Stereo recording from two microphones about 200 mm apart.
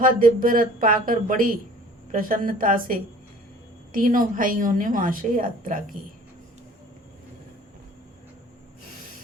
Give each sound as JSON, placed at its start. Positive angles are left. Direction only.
{"t": 0.0, "sound": "a woman's voice", "side_deg": -40}